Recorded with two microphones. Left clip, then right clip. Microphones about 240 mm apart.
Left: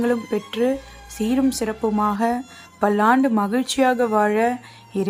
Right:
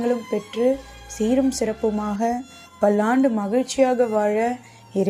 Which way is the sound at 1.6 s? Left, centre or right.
Left.